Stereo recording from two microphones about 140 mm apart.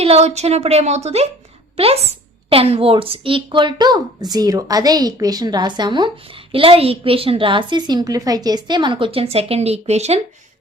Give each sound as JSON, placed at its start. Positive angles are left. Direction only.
{"t": 0.0, "sound": "a woman's voice", "side_deg": -50}